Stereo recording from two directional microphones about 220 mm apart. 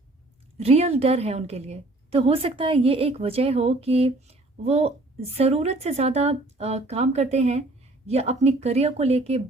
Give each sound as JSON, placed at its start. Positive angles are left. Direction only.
{"t": 0.6, "sound": "a woman's voice", "side_deg": -30}